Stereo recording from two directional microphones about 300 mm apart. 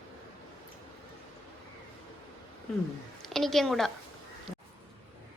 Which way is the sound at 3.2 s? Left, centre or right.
Centre.